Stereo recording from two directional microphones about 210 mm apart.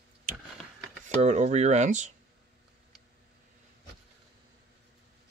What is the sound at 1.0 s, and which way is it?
Speech, 35° right (ahead or behind).